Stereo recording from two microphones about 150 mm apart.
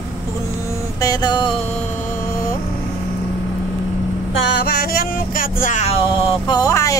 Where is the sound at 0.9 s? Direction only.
25° left (ahead or behind).